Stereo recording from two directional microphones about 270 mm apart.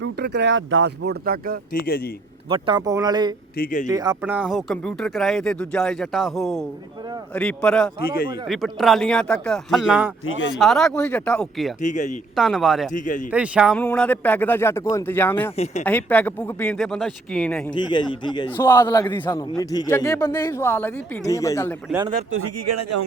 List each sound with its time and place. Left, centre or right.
0.0 s speech: right
1.7 s a man's voice: left
2.5 s speech: centre
3.6 s a man's voice: left
3.8 s speech: centre
11.8 s speech: left
12.4 s speech: centre
12.9 s speech: left
13.3 s a man's voice: centre
15.5 s speech: left
15.8 s speech: centre
17.9 s a man's voice: centre
22.3 s speech: right